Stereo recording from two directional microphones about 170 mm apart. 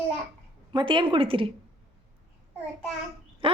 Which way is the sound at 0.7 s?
30° right (ahead or behind).